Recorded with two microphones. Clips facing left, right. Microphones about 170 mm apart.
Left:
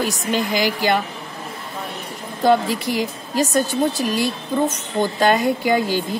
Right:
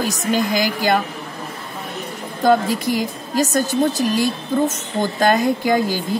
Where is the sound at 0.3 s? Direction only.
40° right (ahead or behind).